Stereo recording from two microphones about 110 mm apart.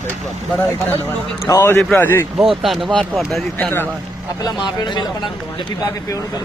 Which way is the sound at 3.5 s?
15° left (ahead or behind).